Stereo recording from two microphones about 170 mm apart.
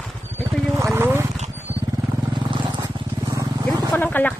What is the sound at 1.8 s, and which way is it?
Vehicle, 25° right (ahead or behind).